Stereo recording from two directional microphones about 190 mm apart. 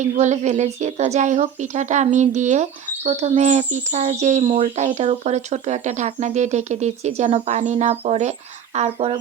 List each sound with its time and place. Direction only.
0.0 s speech: 40° right (ahead or behind)